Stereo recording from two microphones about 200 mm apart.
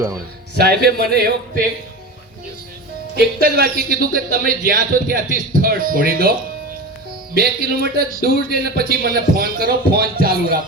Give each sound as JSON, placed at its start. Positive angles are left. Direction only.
{"t": 0.6, "sound": "a man's voice", "side_deg": -50}
{"t": 3.2, "sound": "a man's voice", "side_deg": -50}
{"t": 7.3, "sound": "a man's voice", "side_deg": -50}